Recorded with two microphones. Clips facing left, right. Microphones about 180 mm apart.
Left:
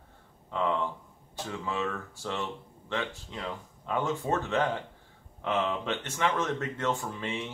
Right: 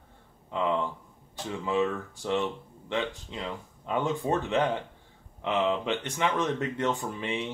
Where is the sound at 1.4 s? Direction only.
15° right (ahead or behind).